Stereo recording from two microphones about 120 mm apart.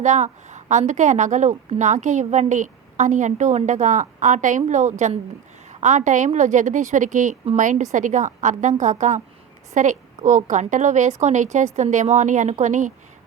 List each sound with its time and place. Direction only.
0.0 s a woman's voice: 80° right